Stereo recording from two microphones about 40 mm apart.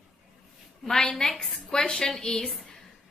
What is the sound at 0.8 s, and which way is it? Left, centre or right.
A woman's voice, centre.